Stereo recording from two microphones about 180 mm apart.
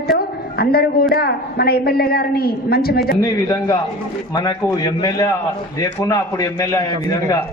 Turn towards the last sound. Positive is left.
turn(degrees=20)  # may be behind; listen again after turning